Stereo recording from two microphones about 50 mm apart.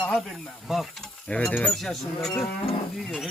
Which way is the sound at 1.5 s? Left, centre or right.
Left.